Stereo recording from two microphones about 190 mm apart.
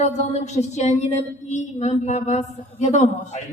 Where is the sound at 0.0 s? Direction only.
35° left (ahead or behind).